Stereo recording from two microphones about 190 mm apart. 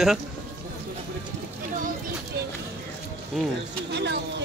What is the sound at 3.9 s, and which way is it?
Speech, 60° right (ahead or behind).